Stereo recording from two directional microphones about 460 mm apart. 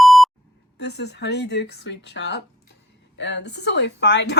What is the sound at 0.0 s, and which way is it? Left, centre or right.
Beep, centre.